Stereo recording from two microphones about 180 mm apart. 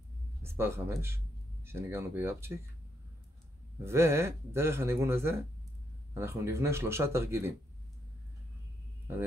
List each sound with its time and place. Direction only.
0.4 s speech: 15° right (ahead or behind)
3.8 s speech: 15° right (ahead or behind)